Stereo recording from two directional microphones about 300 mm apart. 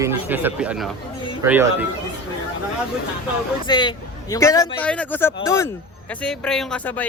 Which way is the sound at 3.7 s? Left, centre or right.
Centre.